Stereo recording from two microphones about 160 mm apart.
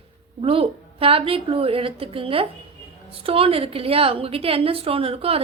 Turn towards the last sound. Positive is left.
turn(degrees=-35)  # may be behind; listen again after turning